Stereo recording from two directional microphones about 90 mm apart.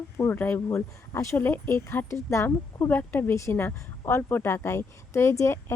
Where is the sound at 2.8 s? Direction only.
20° left (ahead or behind).